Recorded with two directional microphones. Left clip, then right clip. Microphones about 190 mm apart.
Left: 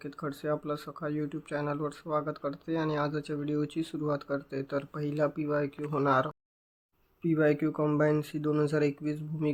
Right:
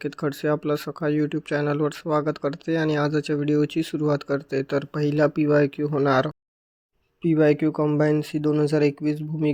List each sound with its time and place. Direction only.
0.0 s speech: 40° right (ahead or behind)
5.9 s speech: 30° right (ahead or behind)